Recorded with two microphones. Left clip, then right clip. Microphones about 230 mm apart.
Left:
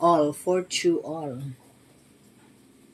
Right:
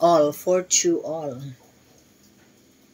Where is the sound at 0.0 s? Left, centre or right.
Centre.